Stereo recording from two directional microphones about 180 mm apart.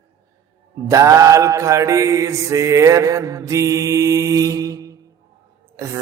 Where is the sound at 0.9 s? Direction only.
15° right (ahead or behind).